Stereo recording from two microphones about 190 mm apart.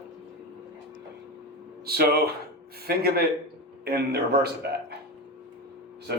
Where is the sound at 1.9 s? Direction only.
55° right (ahead or behind).